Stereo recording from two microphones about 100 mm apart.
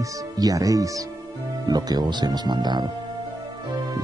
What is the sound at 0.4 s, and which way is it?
Speech, 35° right (ahead or behind).